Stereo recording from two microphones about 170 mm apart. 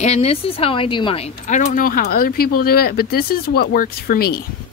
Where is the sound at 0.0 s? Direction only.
40° left (ahead or behind); by 4.4 s 60° left (ahead or behind).